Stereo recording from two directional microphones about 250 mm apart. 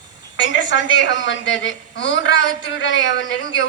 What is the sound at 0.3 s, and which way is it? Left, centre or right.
A woman's voice, left.